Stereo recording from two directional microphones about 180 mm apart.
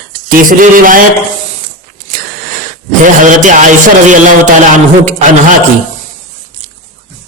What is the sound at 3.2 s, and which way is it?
Speech, 45° right (ahead or behind).